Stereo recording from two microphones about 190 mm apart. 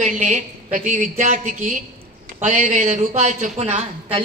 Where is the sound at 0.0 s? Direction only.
40° right (ahead or behind).